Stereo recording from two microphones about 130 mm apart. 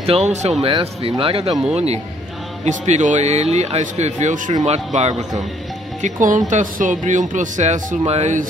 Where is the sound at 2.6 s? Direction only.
65° right (ahead or behind).